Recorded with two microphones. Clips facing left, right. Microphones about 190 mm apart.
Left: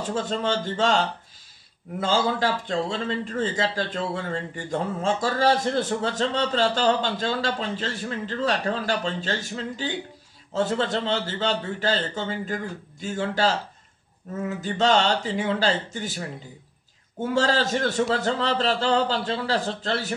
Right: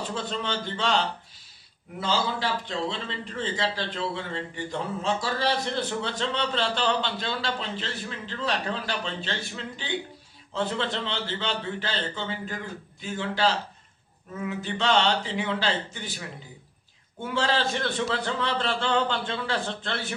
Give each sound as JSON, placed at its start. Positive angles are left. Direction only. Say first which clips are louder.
{"t": 0.1, "sound": "a man's voice", "louder": "left 8 dB", "side_deg": 45}